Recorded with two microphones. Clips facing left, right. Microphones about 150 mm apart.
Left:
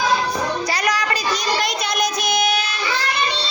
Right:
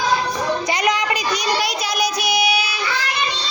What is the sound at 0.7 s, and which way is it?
Child singing, 20° right (ahead or behind).